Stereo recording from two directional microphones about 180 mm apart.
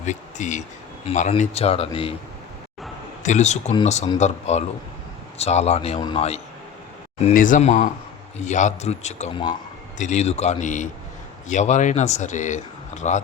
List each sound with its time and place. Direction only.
0.0 s speech: 40° left (ahead or behind)
3.2 s speech: 40° left (ahead or behind)
7.3 s speech: 45° left (ahead or behind)